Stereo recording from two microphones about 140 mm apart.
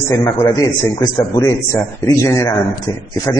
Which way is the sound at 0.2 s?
25° left (ahead or behind).